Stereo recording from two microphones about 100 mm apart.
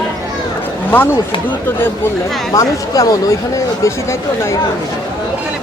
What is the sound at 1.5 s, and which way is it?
Speech, 20° left (ahead or behind).